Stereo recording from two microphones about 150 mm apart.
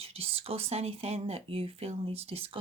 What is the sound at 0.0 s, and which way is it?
Speech, 40° right (ahead or behind).